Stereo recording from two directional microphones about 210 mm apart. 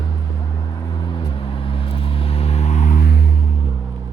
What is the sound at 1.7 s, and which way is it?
Vehicle, 25° left (ahead or behind).